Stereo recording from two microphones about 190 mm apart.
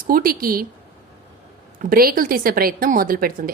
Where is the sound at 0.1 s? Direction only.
50° right (ahead or behind).